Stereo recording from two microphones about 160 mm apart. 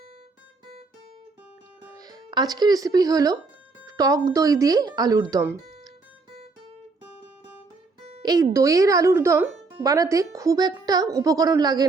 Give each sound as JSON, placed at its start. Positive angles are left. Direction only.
{"t": 2.0, "sound": "speech", "side_deg": -25}
{"t": 8.2, "sound": "speech", "side_deg": -25}